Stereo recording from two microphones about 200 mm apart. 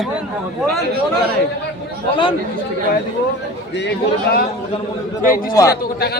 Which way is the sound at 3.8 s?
55° left (ahead or behind).